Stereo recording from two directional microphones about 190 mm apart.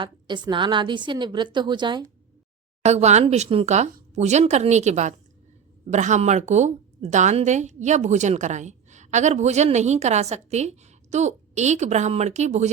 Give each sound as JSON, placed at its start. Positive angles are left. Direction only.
{"t": 0.0, "sound": "a woman's voice", "side_deg": -25}
{"t": 2.8, "sound": "a woman's voice", "side_deg": -35}